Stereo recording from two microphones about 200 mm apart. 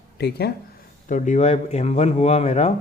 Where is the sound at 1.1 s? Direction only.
40° left (ahead or behind).